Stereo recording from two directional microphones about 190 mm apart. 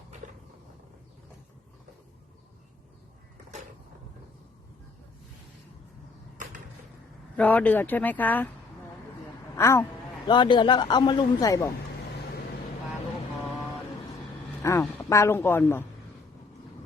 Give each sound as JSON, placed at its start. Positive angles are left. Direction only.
{"t": 6.3, "sound": "a sound", "side_deg": -40}
{"t": 7.3, "sound": "speech", "side_deg": 10}
{"t": 9.6, "sound": "speech", "side_deg": 15}
{"t": 10.2, "sound": "a man's voice", "side_deg": 25}
{"t": 14.6, "sound": "speech", "side_deg": 15}